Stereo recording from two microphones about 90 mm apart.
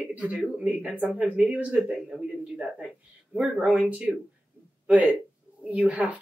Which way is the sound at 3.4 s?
15° right (ahead or behind).